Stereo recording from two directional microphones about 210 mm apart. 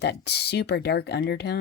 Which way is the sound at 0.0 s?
50° left (ahead or behind).